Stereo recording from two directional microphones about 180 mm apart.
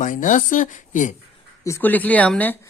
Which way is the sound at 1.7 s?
10° left (ahead or behind).